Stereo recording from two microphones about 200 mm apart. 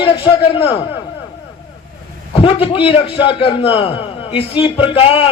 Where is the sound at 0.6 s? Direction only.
25° left (ahead or behind).